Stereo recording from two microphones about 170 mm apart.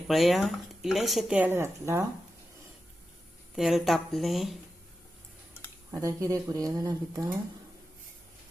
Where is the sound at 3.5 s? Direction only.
Centre (ahead or behind).